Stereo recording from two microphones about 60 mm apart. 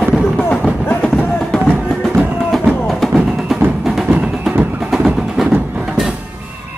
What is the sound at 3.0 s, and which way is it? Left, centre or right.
Music, centre.